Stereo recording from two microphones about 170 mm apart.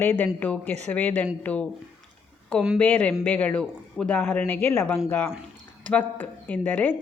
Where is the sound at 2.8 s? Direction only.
10° left (ahead or behind).